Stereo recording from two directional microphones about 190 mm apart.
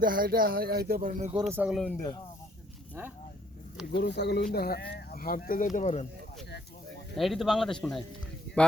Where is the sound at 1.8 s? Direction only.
10° left (ahead or behind).